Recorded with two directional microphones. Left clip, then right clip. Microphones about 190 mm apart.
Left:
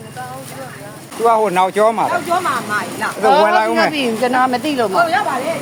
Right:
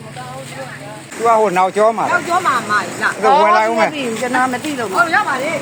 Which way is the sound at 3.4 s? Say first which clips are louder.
Right 1 dB; 5° left (ahead or behind).